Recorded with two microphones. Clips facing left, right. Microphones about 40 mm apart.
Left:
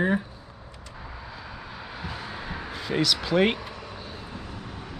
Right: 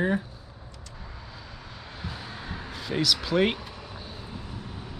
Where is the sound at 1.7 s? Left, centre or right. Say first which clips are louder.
Left 2 dB; centre.